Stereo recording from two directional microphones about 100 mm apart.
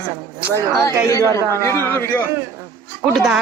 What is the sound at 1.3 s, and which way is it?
Speech, 25° left (ahead or behind).